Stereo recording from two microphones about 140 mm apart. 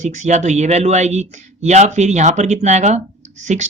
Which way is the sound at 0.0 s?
55° right (ahead or behind).